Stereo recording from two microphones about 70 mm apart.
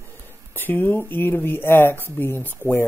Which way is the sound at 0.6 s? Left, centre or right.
Left.